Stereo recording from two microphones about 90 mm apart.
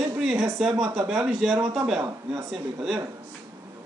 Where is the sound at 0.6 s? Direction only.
5° right (ahead or behind).